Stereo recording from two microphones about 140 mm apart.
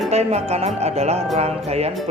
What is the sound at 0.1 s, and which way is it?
Speech, 50° right (ahead or behind).